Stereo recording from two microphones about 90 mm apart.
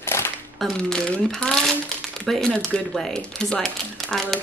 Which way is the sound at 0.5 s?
5° left (ahead or behind).